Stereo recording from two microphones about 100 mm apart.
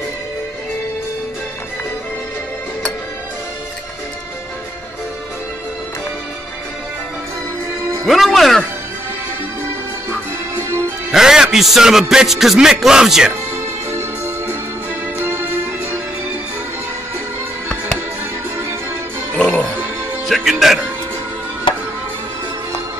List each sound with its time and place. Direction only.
8.1 s music: centre (ahead or behind)
10.0 s music: 25° right (ahead or behind)
11.1 s music: 5° right (ahead or behind)
13.8 s music: 25° right (ahead or behind)
19.3 s music: 15° left (ahead or behind)
20.2 s music: centre (ahead or behind)